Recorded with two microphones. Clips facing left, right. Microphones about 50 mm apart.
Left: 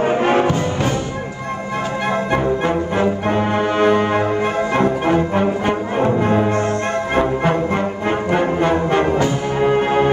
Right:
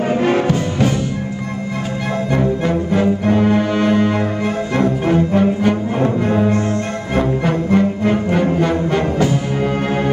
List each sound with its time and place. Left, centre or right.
0.0 s music: centre
0.5 s music: centre
2.3 s brass instrument: centre
7.2 s music: centre